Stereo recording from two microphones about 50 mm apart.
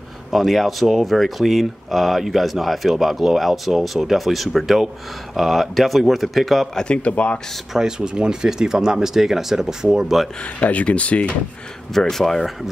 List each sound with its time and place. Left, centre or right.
0.3 s speech: centre
6.8 s speech: left
7.7 s speech: centre
10.6 s speech: left
11.9 s speech: centre